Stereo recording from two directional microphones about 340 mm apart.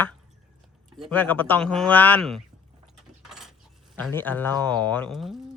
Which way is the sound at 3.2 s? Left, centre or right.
Centre.